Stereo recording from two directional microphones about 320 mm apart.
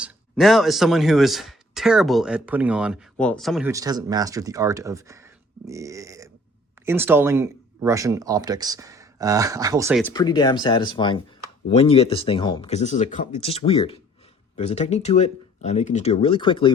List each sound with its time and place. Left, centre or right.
0.0 s speech: centre
10.0 s speech: centre